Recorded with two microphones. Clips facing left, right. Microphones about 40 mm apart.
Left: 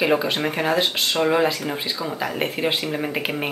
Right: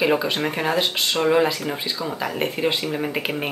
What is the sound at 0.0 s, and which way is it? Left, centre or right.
Speech, centre.